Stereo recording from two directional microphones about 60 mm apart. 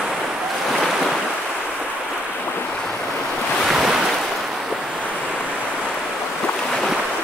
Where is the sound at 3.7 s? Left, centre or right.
Centre.